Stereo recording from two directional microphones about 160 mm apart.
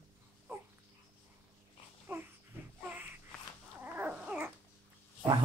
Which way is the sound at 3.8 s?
10° right (ahead or behind).